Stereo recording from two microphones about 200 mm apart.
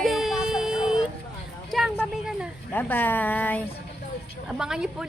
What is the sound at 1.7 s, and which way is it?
Speech, centre (ahead or behind).